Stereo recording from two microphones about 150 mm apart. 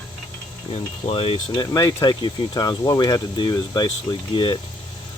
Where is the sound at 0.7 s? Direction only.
40° left (ahead or behind).